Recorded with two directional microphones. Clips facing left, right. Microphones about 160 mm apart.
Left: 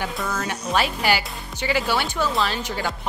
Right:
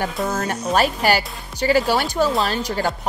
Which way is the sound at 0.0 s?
45° right (ahead or behind).